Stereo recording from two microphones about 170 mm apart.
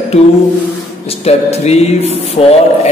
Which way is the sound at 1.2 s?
40° left (ahead or behind).